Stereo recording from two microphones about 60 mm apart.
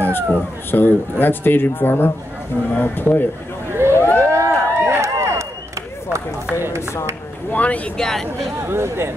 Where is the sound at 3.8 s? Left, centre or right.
Right.